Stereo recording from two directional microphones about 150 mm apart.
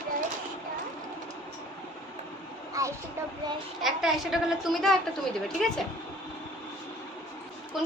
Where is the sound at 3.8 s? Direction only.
Centre (ahead or behind).